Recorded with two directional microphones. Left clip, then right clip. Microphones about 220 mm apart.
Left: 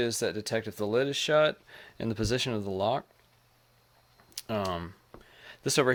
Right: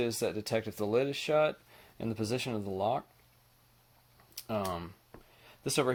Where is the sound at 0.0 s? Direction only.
20° left (ahead or behind).